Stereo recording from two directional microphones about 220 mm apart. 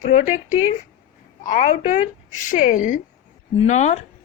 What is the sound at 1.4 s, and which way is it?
A woman's voice, 35° left (ahead or behind).